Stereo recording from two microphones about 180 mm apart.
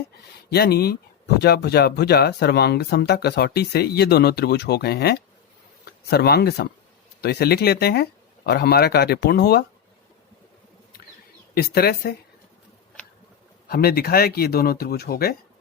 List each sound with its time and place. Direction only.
0.5 s speech: 60° left (ahead or behind)
11.5 s speech: 60° left (ahead or behind)
13.7 s speech: 55° left (ahead or behind)